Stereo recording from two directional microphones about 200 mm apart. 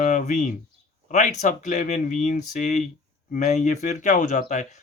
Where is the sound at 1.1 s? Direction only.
35° left (ahead or behind).